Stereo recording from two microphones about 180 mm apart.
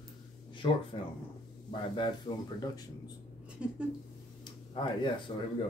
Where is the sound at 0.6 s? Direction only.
25° left (ahead or behind).